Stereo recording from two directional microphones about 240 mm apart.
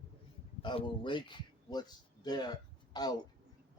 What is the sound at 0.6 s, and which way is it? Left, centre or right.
A man's voice, centre.